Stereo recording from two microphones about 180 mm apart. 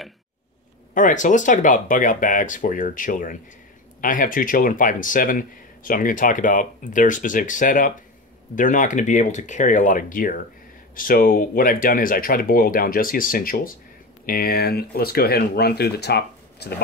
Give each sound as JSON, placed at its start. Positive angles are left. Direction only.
{"t": 0.9, "sound": "speech", "side_deg": 45}